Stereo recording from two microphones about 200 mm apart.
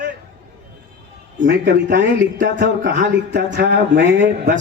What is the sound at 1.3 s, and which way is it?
Speech, 55° right (ahead or behind).